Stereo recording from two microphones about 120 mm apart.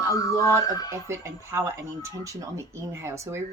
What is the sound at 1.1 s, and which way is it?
Speech, 20° right (ahead or behind).